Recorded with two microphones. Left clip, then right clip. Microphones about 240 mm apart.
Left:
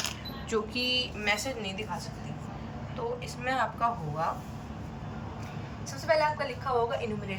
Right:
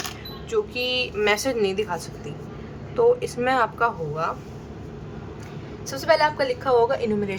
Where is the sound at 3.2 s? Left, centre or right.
Centre.